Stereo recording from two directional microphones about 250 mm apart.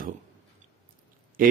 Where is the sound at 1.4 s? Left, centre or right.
Right.